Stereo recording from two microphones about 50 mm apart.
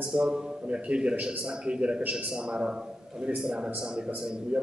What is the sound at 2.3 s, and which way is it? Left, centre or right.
A man's voice, centre.